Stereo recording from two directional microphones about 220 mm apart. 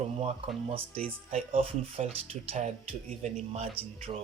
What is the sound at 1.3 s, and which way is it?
Speech, 25° right (ahead or behind).